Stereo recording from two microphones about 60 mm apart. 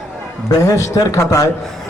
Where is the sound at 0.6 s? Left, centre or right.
Left.